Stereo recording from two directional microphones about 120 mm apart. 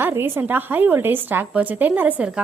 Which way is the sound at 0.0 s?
20° right (ahead or behind).